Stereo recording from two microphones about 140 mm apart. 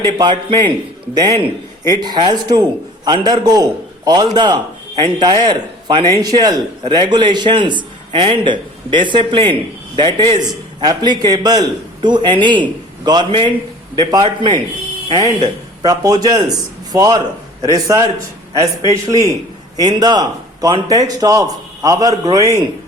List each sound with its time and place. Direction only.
0.0 s a man's voice: 30° right (ahead or behind)